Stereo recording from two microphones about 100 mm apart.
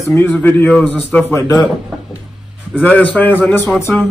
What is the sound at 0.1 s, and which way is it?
Speech, 20° left (ahead or behind).